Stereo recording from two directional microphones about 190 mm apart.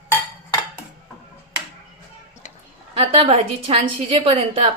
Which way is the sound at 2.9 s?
30° right (ahead or behind).